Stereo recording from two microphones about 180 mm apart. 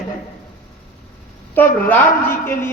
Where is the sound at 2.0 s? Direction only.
50° left (ahead or behind).